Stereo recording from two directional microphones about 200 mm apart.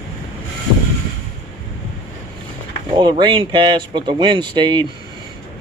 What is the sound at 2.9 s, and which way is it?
Speech, 25° right (ahead or behind).